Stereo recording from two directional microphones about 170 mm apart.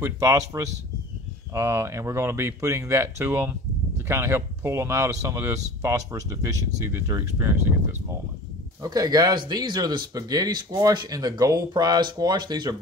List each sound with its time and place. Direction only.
0.0 s speech: 20° right (ahead or behind)
8.8 s speech: 20° right (ahead or behind)